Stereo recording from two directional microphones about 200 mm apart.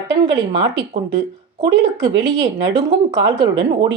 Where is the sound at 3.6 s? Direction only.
25° right (ahead or behind).